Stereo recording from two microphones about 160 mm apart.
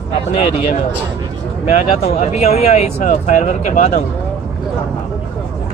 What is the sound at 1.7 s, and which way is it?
Speech, 40° left (ahead or behind).